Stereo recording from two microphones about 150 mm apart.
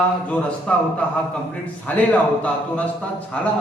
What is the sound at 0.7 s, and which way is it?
Speech, 5° left (ahead or behind).